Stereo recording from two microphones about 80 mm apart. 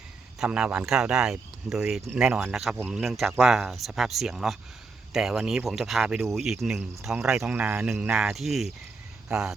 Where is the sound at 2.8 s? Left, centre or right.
Right.